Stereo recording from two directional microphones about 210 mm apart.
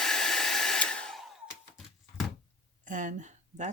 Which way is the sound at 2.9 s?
35° right (ahead or behind).